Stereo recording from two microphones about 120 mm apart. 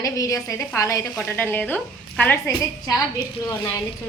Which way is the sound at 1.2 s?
15° left (ahead or behind).